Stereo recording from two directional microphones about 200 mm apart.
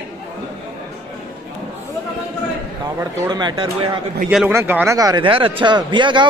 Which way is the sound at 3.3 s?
20° right (ahead or behind).